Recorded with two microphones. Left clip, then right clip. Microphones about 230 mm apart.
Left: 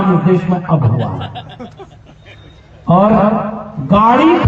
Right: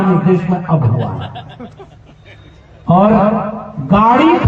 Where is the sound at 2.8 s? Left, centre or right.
Left.